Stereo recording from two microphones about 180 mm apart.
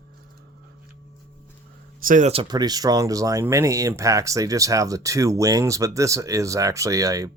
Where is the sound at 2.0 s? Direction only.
45° right (ahead or behind).